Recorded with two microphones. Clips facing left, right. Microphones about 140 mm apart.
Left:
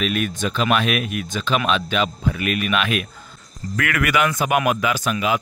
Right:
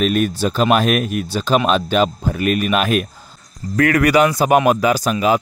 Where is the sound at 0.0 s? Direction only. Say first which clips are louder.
Right 6 dB; 40° right (ahead or behind).